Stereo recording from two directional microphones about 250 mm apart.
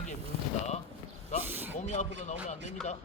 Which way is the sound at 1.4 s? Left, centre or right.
Centre.